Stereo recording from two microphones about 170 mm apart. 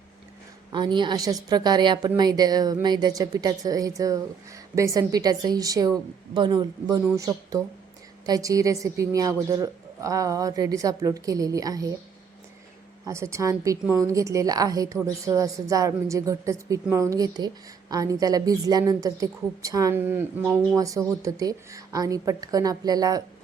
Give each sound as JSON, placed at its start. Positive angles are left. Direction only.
{"t": 0.7, "sound": "a woman's voice", "side_deg": -25}
{"t": 13.1, "sound": "a woman's voice", "side_deg": -15}